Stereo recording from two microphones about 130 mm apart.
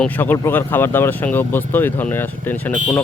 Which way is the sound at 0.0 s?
15° left (ahead or behind).